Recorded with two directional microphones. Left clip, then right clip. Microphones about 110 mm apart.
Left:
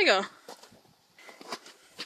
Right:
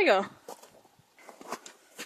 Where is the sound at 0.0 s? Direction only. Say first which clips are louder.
Even; 5° right (ahead or behind).